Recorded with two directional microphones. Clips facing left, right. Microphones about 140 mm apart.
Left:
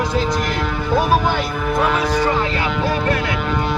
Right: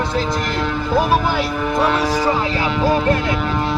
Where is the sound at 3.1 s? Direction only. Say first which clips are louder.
Right 2 dB; 25° right (ahead or behind).